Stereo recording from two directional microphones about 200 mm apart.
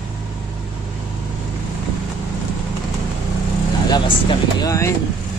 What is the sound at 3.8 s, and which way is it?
Speech, 20° left (ahead or behind).